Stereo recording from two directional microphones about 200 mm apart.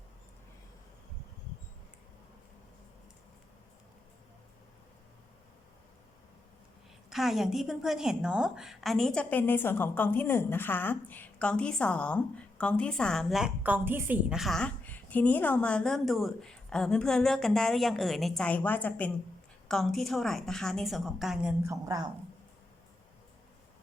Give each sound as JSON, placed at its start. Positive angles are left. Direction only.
{"t": 7.1, "sound": "a woman's voice", "side_deg": 0}
{"t": 21.6, "sound": "speech", "side_deg": -15}